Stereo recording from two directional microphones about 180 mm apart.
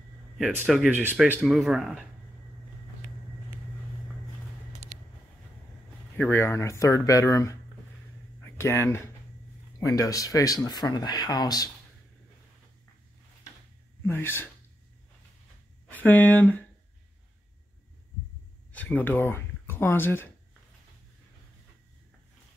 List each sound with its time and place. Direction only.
0.4 s speech: centre (ahead or behind)
6.1 s speech: 10° left (ahead or behind)
8.4 s a sound: 15° left (ahead or behind)
9.8 s speech: 20° left (ahead or behind)
14.0 s speech: 10° left (ahead or behind)
15.9 s speech: 10° left (ahead or behind)
18.7 s speech: 10° left (ahead or behind)